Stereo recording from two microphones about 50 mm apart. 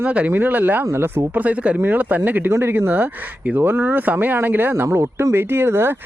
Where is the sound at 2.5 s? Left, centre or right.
Right.